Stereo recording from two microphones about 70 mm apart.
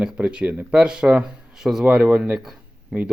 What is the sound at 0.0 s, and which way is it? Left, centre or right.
Speech, centre.